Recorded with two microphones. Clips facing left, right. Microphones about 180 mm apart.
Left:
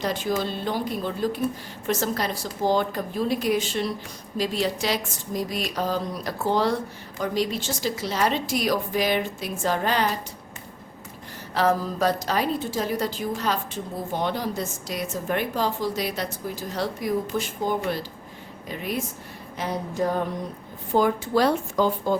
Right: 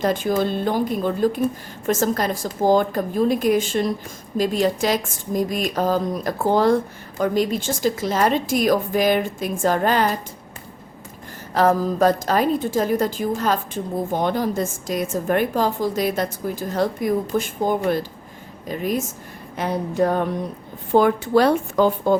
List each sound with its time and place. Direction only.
0.0 s a woman's voice: 50° right (ahead or behind)
11.5 s a woman's voice: 45° right (ahead or behind)
19.5 s speech: 60° right (ahead or behind)